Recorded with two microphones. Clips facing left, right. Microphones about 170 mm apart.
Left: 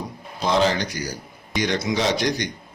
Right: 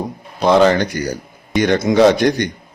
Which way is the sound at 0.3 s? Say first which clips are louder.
Right 8 dB; 60° right (ahead or behind).